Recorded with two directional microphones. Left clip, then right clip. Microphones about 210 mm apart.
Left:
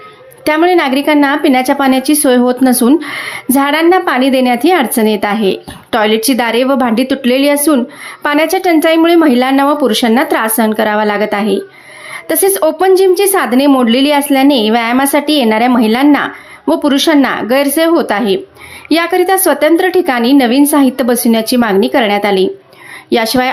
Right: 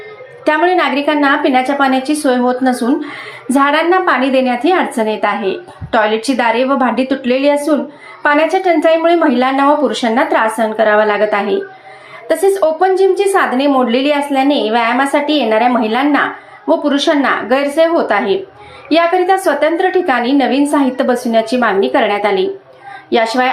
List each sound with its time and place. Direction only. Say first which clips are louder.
0.4 s a woman's voice: left 2 dB; 40° left (ahead or behind)